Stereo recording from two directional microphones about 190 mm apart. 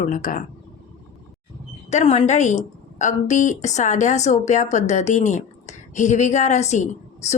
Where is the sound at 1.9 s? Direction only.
35° left (ahead or behind).